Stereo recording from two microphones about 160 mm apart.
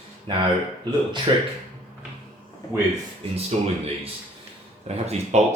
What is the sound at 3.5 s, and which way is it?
Speech, 40° right (ahead or behind).